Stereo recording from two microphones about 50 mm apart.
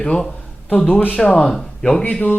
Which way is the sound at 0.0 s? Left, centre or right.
Centre.